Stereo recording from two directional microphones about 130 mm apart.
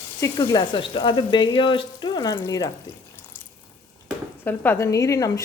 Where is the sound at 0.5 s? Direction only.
40° left (ahead or behind).